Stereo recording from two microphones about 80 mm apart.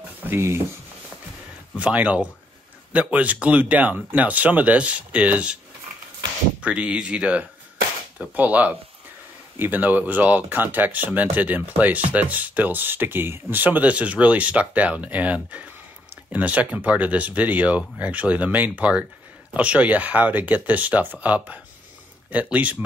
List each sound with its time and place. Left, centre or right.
0.3 s speech: right
1.8 s speech: centre
6.6 s speech: centre